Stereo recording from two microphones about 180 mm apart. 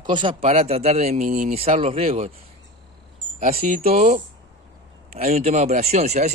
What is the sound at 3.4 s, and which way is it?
Speech, 55° right (ahead or behind).